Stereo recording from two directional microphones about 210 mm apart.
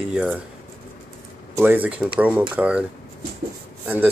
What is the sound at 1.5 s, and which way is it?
Speech, 10° right (ahead or behind).